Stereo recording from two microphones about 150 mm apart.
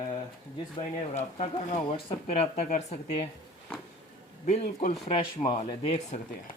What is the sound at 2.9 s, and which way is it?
Speech, 50° left (ahead or behind).